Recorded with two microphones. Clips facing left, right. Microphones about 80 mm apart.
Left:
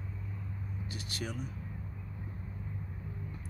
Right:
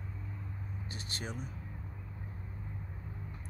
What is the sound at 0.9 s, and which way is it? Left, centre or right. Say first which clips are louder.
Speech: left 2 dB; right.